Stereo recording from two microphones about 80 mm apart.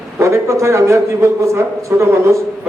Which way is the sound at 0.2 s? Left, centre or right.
Right.